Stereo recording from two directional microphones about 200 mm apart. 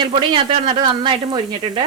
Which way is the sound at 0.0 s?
25° right (ahead or behind).